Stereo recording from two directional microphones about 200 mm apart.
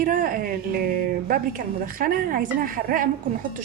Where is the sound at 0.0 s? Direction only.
40° right (ahead or behind).